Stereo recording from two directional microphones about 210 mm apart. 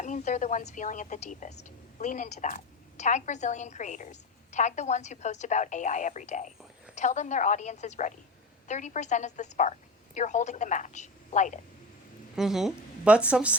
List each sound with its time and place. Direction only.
0.0 s a woman's voice: 35° left (ahead or behind)
12.4 s a woman's voice: centre (ahead or behind)